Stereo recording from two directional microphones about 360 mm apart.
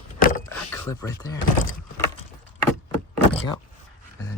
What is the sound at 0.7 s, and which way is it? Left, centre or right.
Speech, centre.